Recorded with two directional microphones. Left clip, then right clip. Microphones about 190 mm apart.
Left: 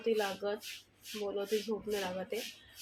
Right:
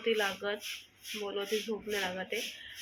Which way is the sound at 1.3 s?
10° left (ahead or behind).